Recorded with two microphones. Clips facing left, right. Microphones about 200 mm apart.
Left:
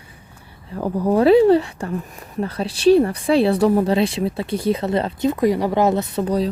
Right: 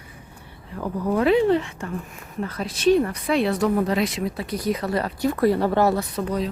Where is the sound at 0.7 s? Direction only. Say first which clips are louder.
Left 5 dB; 35° left (ahead or behind).